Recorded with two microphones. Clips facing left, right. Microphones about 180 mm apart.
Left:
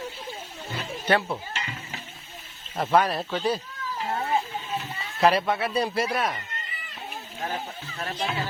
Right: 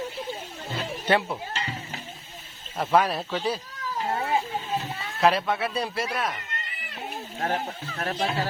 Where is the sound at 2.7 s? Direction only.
Centre (ahead or behind).